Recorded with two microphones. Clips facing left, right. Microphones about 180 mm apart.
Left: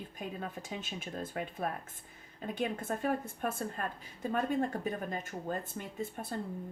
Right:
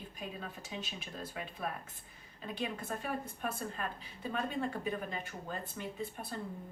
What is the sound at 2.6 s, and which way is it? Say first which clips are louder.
A woman's voice: left 5 dB; 45° left (ahead or behind).